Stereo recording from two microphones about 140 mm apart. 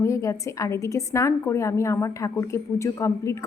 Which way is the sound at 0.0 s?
20° left (ahead or behind).